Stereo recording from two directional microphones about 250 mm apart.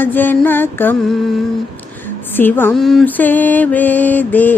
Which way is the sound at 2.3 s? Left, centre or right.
Centre.